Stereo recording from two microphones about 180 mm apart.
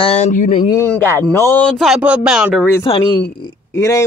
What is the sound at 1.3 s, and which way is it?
Speech, 10° left (ahead or behind).